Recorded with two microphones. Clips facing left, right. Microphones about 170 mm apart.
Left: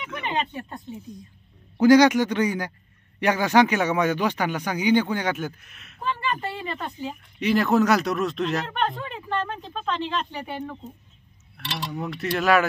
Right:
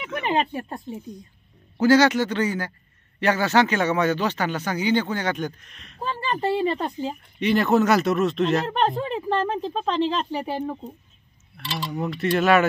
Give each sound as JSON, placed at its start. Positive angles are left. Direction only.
{"t": 0.0, "sound": "speech", "side_deg": -40}
{"t": 1.8, "sound": "speech", "side_deg": 15}
{"t": 5.9, "sound": "speech", "side_deg": -40}
{"t": 7.3, "sound": "speech", "side_deg": 0}
{"t": 8.6, "sound": "speech", "side_deg": -35}
{"t": 11.6, "sound": "cutlery", "side_deg": 0}
{"t": 12.2, "sound": "speech", "side_deg": 0}